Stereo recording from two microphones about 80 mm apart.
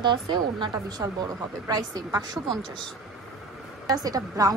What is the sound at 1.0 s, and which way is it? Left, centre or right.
Speech, right.